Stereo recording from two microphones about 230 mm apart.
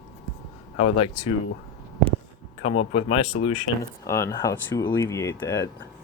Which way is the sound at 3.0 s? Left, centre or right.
Left.